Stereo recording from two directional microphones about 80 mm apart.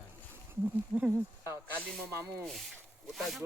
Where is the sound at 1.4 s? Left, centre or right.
Right.